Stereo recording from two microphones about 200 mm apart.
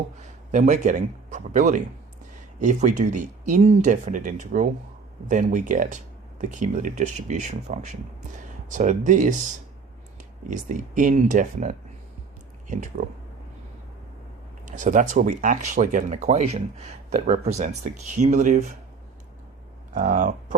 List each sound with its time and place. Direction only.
0.2 s speech: 40° right (ahead or behind)
10.5 s speech: 40° right (ahead or behind)
14.6 s speech: 40° right (ahead or behind)
19.9 s speech: 40° right (ahead or behind)